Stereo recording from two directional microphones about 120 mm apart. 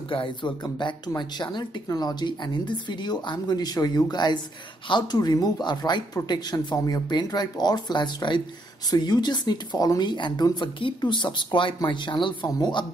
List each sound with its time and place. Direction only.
0.1 s speech: 45° left (ahead or behind)